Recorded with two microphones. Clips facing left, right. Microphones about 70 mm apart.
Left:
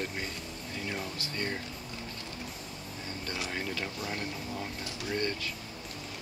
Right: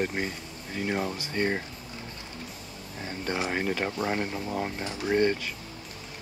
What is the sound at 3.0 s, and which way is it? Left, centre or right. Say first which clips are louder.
Speech: right 8 dB; right.